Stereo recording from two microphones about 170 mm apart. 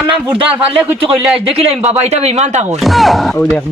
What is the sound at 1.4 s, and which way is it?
Speech, 35° right (ahead or behind).